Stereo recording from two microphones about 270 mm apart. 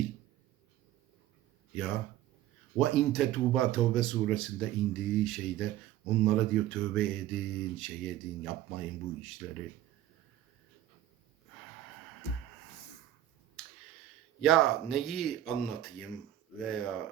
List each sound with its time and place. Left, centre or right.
1.7 s speech: centre
12.2 s music: left
14.4 s speech: centre